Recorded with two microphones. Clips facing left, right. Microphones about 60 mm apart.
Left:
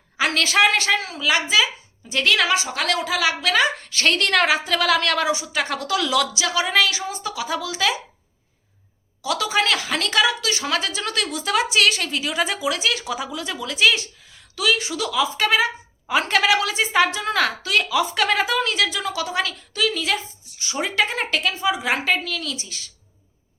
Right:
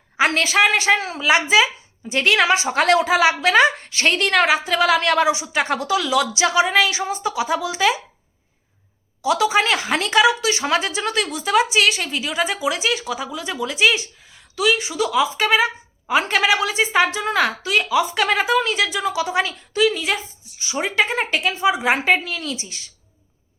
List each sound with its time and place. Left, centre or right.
0.2 s a woman's voice: right
0.4 s a woman's voice: centre
0.9 s a woman's voice: right
9.2 s a woman's voice: centre
11.1 s a woman's voice: centre; by 22.9 s right